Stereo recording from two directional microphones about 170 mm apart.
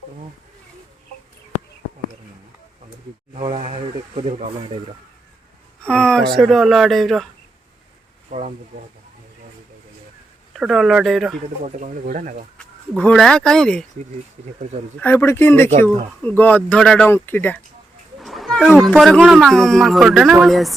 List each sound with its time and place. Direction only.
3.5 s a sound: 40° right (ahead or behind)
5.8 s a sound: 5° left (ahead or behind)
6.3 s a man's voice: centre (ahead or behind)
8.3 s a sound: 45° right (ahead or behind)
10.5 s a man's voice: centre (ahead or behind)
11.6 s speech: 50° right (ahead or behind)
12.9 s a man's voice: 5° left (ahead or behind)
15.0 s speech: 15° left (ahead or behind)
18.2 s wild animals: centre (ahead or behind)
18.8 s a man's voice: centre (ahead or behind)